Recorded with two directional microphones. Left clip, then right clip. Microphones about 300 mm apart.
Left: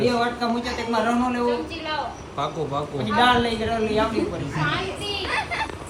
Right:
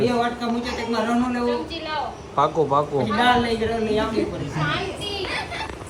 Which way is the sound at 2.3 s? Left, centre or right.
Right.